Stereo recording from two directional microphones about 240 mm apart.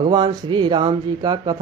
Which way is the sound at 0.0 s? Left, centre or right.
Centre.